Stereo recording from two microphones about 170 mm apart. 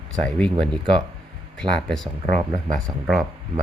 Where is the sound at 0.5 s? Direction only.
30° right (ahead or behind).